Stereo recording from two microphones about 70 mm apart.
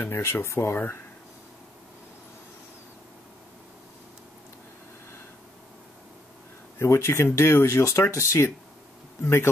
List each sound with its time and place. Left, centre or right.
0.0 s speech: left
6.8 s speech: left